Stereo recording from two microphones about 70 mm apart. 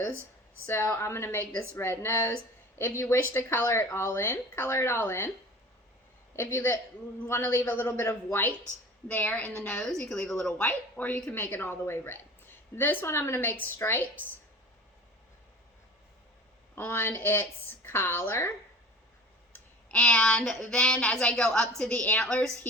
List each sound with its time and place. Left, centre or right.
0.6 s a woman's voice: left
6.3 s a woman's voice: left; by 10.5 s centre
10.6 s a woman's voice: left
16.7 s a woman's voice: left
19.5 s speech: centre